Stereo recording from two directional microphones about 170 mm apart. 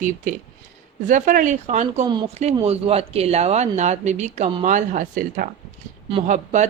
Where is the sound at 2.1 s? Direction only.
25° right (ahead or behind).